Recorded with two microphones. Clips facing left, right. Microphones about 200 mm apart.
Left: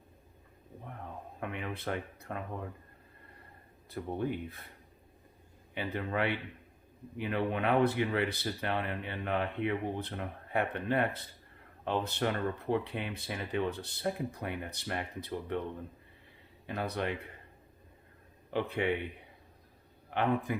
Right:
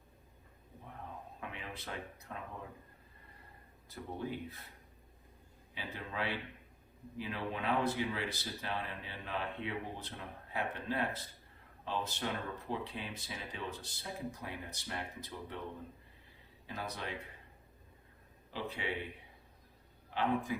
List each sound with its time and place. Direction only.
1.4 s speech: 60° left (ahead or behind)
3.8 s speech: 60° left (ahead or behind)
5.7 s speech: 60° left (ahead or behind)
16.6 s speech: 60° left (ahead or behind)
18.5 s speech: 60° left (ahead or behind)
20.1 s a man's voice: 60° left (ahead or behind)